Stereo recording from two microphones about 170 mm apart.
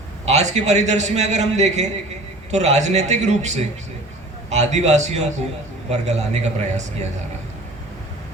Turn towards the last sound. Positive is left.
turn(degrees=-40)  # may be behind; listen again after turning